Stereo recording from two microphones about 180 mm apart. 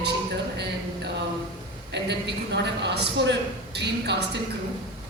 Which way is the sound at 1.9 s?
70° right (ahead or behind).